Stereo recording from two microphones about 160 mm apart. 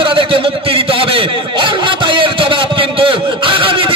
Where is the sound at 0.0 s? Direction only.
30° right (ahead or behind).